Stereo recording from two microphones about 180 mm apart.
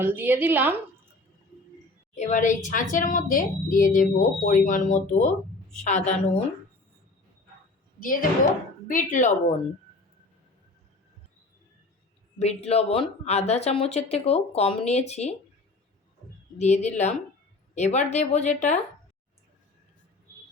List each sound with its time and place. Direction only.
0.0 s a woman's voice: 10° right (ahead or behind)
2.1 s a woman's voice: 40° left (ahead or behind)
7.9 s a woman's voice: 50° left (ahead or behind)
12.4 s speech: 35° left (ahead or behind)
16.6 s speech: 40° left (ahead or behind)